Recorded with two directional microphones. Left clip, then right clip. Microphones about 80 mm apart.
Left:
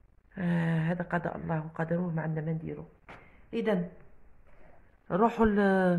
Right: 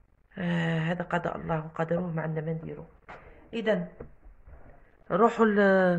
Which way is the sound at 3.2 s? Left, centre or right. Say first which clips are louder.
Right 2 dB; left.